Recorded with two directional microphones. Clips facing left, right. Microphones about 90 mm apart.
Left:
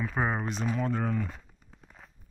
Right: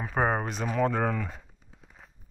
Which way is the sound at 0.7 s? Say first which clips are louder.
Right 8 dB; 90° right.